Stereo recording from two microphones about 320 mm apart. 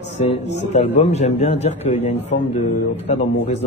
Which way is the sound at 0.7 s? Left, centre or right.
Centre.